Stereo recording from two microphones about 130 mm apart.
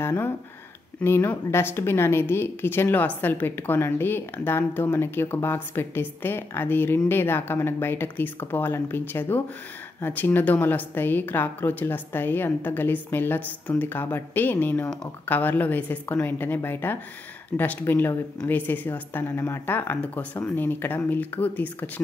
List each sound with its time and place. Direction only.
0.0 s a woman's voice: 15° left (ahead or behind)